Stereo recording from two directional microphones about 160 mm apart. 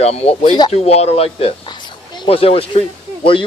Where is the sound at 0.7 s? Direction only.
40° left (ahead or behind).